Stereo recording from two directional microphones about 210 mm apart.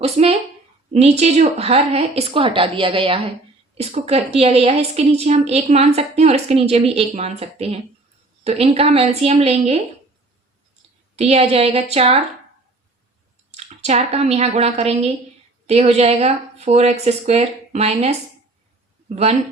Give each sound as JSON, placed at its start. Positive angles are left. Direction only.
{"t": 0.0, "sound": "a woman's voice", "side_deg": -30}
{"t": 11.2, "sound": "a woman's voice", "side_deg": -30}
{"t": 13.7, "sound": "a woman's voice", "side_deg": -30}